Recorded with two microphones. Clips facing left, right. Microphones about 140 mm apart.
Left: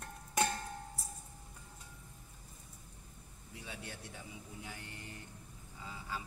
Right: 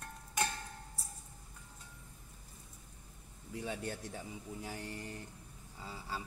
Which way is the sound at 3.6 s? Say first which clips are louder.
Right 8 dB; 45° right (ahead or behind).